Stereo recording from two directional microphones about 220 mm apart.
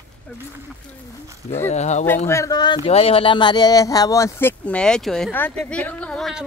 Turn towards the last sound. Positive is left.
turn(degrees=0)  # may be behind; listen again after turning